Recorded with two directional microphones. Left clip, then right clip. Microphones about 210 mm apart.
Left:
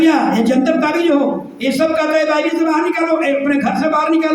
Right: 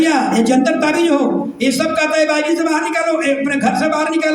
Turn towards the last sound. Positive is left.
turn(degrees=-55)  # may be behind; listen again after turning